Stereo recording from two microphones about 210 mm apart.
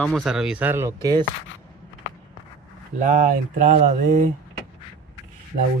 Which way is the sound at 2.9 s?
35° right (ahead or behind).